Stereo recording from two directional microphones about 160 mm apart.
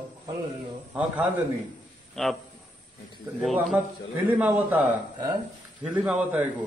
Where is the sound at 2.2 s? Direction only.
Centre (ahead or behind).